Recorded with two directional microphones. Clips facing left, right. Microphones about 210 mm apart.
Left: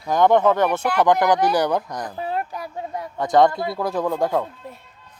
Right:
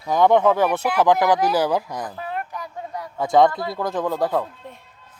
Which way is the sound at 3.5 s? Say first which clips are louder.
Left 2 dB; 25° left (ahead or behind).